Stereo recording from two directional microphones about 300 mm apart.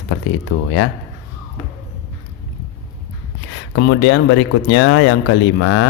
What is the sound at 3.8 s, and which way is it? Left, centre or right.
A man's voice, left.